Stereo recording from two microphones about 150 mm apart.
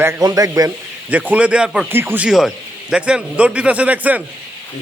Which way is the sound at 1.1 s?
10° right (ahead or behind).